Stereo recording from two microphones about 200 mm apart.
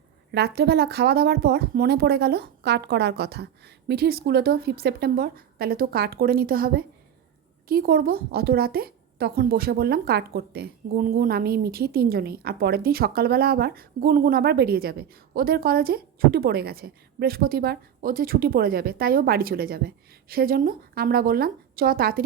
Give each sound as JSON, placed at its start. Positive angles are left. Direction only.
{"t": 0.3, "sound": "a woman's voice", "side_deg": -55}